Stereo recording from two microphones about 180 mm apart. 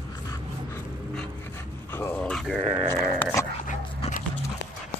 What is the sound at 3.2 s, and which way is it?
Dog, 15° left (ahead or behind).